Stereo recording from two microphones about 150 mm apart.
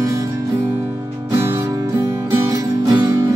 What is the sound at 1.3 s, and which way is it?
Music, 15° right (ahead or behind).